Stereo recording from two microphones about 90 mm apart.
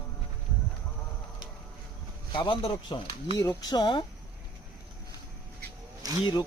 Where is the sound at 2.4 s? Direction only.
85° left.